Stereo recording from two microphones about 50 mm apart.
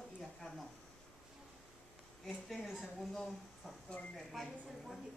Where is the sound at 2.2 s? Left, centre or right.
Centre.